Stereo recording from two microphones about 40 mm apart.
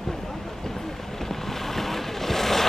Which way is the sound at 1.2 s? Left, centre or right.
Centre.